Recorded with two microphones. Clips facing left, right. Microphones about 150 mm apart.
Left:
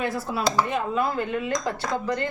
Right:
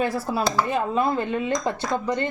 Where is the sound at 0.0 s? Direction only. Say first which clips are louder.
Right 2 dB; 35° right (ahead or behind).